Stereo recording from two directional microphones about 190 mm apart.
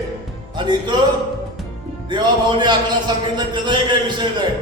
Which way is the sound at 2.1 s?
25° right (ahead or behind).